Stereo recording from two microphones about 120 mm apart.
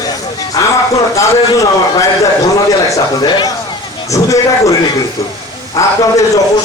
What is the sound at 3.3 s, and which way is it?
Speech, 40° left (ahead or behind).